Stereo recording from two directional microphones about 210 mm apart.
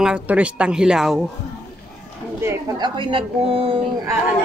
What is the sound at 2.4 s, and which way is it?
A woman's voice, 15° right (ahead or behind).